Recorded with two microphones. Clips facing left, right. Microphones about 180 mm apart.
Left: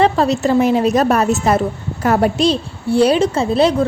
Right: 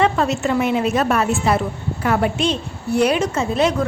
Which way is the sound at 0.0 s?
35° left (ahead or behind).